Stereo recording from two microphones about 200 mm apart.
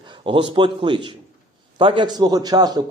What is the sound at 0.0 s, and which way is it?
A man's voice, 25° right (ahead or behind).